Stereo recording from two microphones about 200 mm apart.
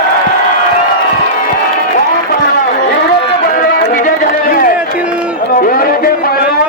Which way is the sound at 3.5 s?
50° left (ahead or behind).